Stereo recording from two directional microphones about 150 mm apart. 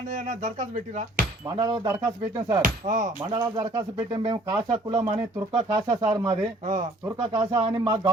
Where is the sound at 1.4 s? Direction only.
25° right (ahead or behind).